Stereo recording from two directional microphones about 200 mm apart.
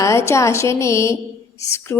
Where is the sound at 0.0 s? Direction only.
15° left (ahead or behind).